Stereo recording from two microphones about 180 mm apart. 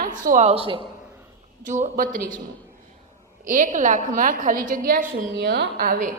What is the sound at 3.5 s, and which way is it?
A woman's voice, 45° right (ahead or behind).